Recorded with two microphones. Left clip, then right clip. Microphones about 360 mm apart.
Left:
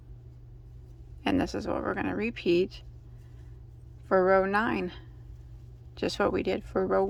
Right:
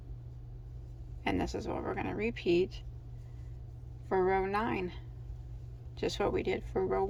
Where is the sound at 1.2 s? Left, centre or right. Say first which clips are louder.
Left 5 dB; centre.